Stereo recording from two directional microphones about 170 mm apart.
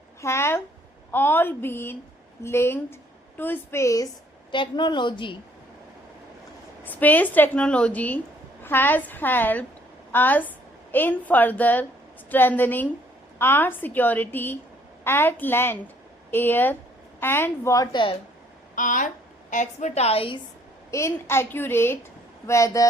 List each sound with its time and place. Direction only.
0.2 s a woman's voice: 15° left (ahead or behind)
6.8 s a woman's voice: 10° left (ahead or behind); by 18.2 s 30° left (ahead or behind)
18.8 s a woman's voice: 50° left (ahead or behind); by 20.4 s 30° left (ahead or behind)
20.9 s a woman's voice: 15° left (ahead or behind)